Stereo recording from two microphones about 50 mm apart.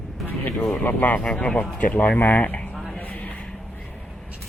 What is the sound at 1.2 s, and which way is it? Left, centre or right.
Speech, left.